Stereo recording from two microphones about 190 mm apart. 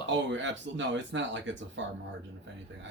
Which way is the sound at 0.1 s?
70° right (ahead or behind).